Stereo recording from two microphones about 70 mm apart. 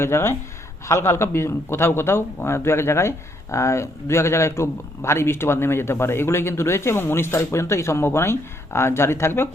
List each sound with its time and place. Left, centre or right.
0.0 s speech: left